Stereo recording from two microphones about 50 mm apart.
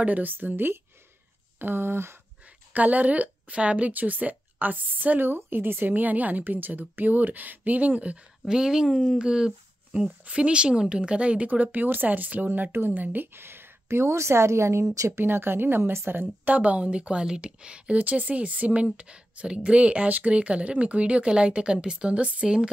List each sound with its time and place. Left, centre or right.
0.0 s a woman's voice: right
2.7 s a woman's voice: right
5.3 s a woman's voice: right
8.5 s speech: centre; by 13.7 s right
13.8 s speech: right
15.2 s speech: right
16.1 s speech: right; by 22.7 s centre